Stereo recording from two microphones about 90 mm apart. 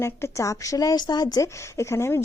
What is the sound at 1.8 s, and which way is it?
Speech, 30° left (ahead or behind).